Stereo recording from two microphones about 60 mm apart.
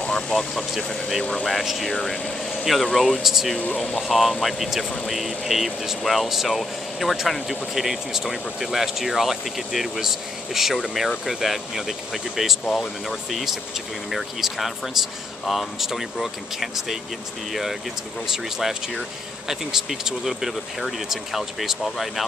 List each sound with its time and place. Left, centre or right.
0.0 s speech: centre
1.5 s speech: centre
3.5 s speech: centre
4.0 s speech: centre